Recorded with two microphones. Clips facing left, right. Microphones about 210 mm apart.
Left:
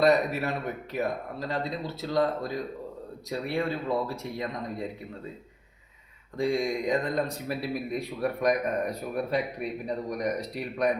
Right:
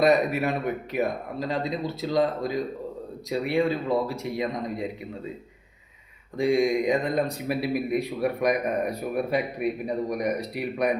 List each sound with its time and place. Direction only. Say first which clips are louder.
0.0 s speech: right 2 dB; 15° right (ahead or behind)
6.3 s speech: right 5 dB; 10° right (ahead or behind)